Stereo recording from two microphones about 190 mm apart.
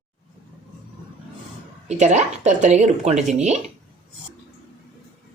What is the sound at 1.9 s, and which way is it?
Speech, 35° right (ahead or behind).